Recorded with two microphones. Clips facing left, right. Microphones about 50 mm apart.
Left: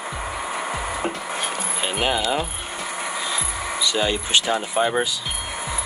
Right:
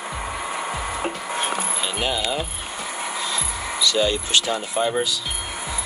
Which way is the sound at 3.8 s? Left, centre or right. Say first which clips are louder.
Right 2 dB; centre.